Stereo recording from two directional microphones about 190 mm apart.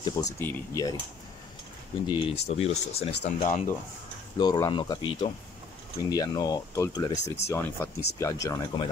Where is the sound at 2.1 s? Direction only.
25° left (ahead or behind).